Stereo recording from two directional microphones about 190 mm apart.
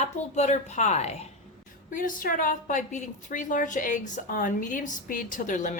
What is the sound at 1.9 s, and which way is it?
A woman's voice, 45° left (ahead or behind).